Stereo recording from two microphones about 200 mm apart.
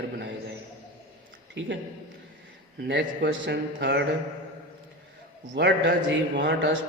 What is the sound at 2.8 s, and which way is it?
A man's voice, 60° right (ahead or behind).